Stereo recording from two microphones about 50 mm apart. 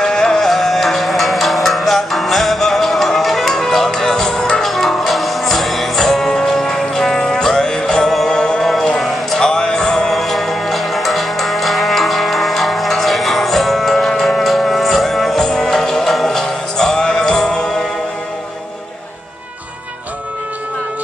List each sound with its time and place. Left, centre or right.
0.0 s music: centre
0.5 s music: centre
9.0 s a sound: centre
9.5 s music: centre